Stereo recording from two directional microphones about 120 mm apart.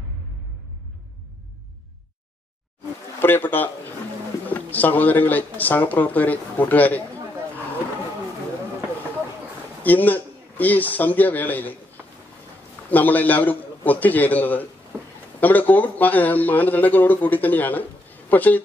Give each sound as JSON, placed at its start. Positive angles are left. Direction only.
{"t": 3.2, "sound": "speech", "side_deg": 15}
{"t": 9.8, "sound": "a man's voice", "side_deg": 15}
{"t": 12.9, "sound": "speech", "side_deg": 15}